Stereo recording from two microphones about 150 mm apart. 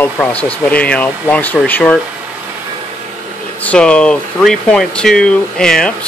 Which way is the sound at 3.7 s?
5° left (ahead or behind).